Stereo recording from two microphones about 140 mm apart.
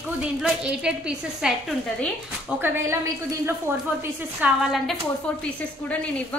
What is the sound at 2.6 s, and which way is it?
Speech, 20° right (ahead or behind).